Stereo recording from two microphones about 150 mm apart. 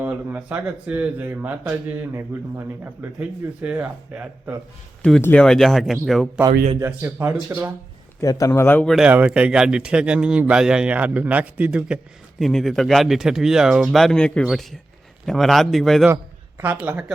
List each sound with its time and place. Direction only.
0.0 s speech: 10° right (ahead or behind)
5.0 s speech: 5° left (ahead or behind)
6.7 s speech: 15° right (ahead or behind)
8.2 s speech: 20° left (ahead or behind)
8.9 s speech: 5° right (ahead or behind)
16.6 s speech: 10° right (ahead or behind)